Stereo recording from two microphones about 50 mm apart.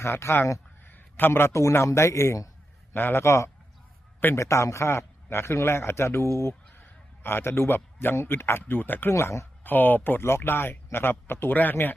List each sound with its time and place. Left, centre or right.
0.0 s speech: left
0.9 s a sound: left
1.7 s speech: left
2.9 s speech: left
4.4 s a man's voice: left
6.5 s a man's voice: left
8.6 s speech: left
9.0 s speech: left
9.6 s speech: left
10.2 s speech: left